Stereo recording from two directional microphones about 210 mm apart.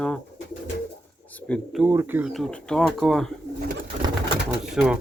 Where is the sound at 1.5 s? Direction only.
5° left (ahead or behind).